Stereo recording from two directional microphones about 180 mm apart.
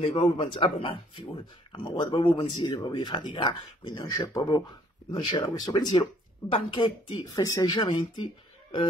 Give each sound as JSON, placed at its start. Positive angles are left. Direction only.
{"t": 0.0, "sound": "speech", "side_deg": 30}